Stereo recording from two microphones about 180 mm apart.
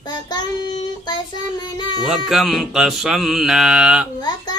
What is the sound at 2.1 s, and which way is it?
Music, centre (ahead or behind).